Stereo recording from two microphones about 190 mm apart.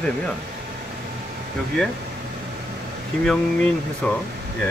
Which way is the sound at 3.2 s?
5° left (ahead or behind).